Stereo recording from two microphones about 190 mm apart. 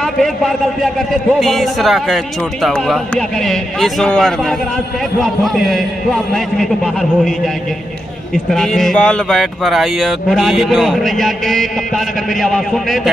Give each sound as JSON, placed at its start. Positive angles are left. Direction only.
{"t": 1.4, "sound": "a man's voice", "side_deg": 0}
{"t": 8.5, "sound": "a man's voice", "side_deg": 0}